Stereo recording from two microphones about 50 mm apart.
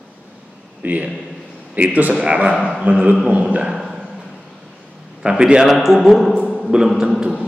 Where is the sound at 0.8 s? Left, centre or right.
Right.